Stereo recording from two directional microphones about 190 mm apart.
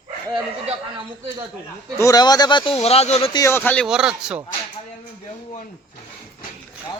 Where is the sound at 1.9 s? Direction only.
20° left (ahead or behind).